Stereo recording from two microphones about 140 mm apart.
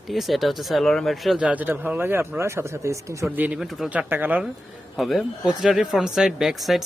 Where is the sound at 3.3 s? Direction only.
10° right (ahead or behind).